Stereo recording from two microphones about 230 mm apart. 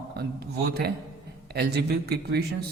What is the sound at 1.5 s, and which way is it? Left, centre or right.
Speech, right.